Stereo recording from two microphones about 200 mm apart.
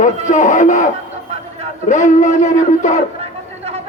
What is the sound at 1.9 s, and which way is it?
Speech, 40° left (ahead or behind).